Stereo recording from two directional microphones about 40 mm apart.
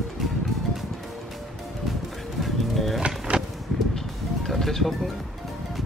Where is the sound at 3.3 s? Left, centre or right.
Right.